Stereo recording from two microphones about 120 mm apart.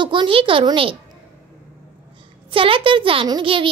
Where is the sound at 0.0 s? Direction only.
40° right (ahead or behind).